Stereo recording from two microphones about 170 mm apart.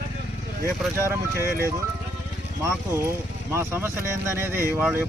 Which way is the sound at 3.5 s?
15° right (ahead or behind).